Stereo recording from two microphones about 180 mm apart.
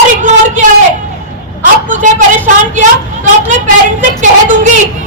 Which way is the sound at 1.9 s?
45° right (ahead or behind).